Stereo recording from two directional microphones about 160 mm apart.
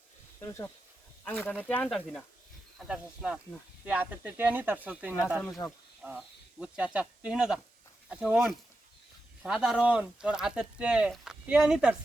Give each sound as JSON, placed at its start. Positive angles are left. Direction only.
{"t": 0.3, "sound": "speech", "side_deg": 20}
{"t": 2.7, "sound": "speech", "side_deg": -5}
{"t": 5.6, "sound": "speech", "side_deg": 15}
{"t": 6.0, "sound": "speech", "side_deg": -5}